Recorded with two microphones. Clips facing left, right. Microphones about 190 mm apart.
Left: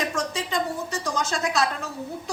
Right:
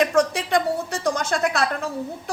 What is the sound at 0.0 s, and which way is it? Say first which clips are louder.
Speech: right 8 dB; 60° right (ahead or behind).